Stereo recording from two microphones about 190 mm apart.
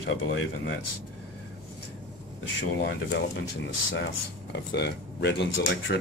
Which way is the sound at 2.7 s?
65° left (ahead or behind).